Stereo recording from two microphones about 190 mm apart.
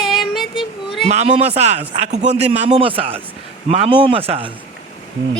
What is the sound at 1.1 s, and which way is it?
A man's voice, 35° right (ahead or behind).